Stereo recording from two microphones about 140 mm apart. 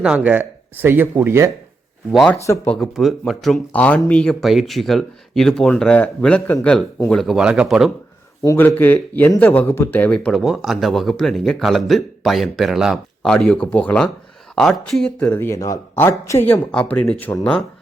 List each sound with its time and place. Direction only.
0.0 s speech: 5° right (ahead or behind)
2.1 s speech: 5° left (ahead or behind)
2.4 s speech: 20° left (ahead or behind)
2.7 s speech: centre (ahead or behind)
8.4 s speech: 15° left (ahead or behind)